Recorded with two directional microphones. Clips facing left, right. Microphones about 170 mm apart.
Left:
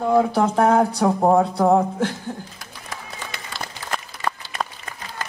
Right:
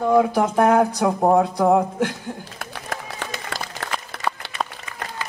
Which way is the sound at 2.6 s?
65° right (ahead or behind).